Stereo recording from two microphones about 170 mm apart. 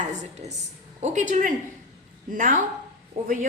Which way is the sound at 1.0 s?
45° right (ahead or behind).